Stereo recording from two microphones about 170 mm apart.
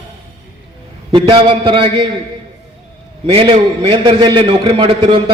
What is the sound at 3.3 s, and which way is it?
A man's voice, 30° right (ahead or behind).